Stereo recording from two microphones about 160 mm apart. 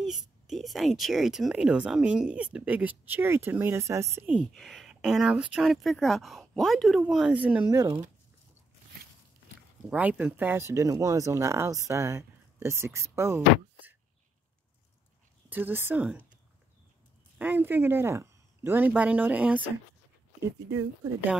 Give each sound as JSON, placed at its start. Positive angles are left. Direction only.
{"t": 0.0, "sound": "speech", "side_deg": 0}
{"t": 4.6, "sound": "speech", "side_deg": 0}
{"t": 9.8, "sound": "speech", "side_deg": -10}
{"t": 15.5, "sound": "speech", "side_deg": -10}
{"t": 17.4, "sound": "speech", "side_deg": -10}